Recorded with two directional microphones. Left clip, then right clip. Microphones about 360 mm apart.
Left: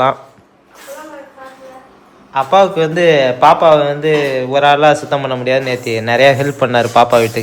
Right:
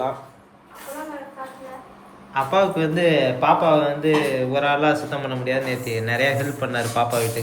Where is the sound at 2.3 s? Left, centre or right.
Centre.